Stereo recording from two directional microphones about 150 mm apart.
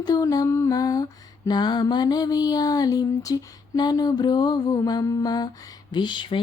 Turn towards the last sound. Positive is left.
turn(degrees=30)  # may be behind; listen again after turning